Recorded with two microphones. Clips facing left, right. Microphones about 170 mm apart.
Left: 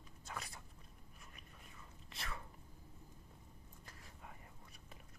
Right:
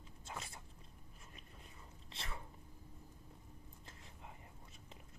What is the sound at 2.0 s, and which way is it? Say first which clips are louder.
Whispering: left 1 dB; 25° right (ahead or behind).